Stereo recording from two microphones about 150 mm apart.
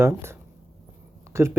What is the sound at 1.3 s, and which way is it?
Speech, 15° right (ahead or behind).